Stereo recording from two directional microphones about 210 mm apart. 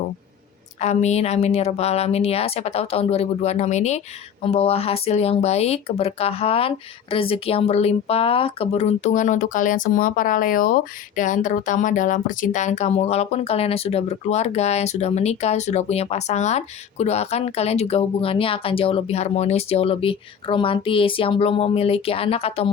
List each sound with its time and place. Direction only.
0.8 s speech: 30° left (ahead or behind)